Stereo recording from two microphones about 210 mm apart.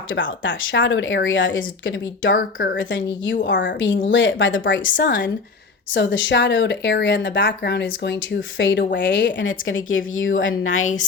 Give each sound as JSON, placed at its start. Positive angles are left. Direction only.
{"t": 0.1, "sound": "a woman's voice", "side_deg": 65}
{"t": 10.8, "sound": "a woman's voice", "side_deg": 35}